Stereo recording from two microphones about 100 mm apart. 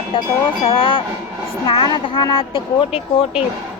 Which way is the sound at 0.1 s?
60° left (ahead or behind).